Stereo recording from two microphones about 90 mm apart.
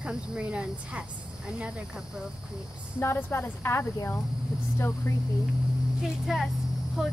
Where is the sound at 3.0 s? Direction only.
25° left (ahead or behind).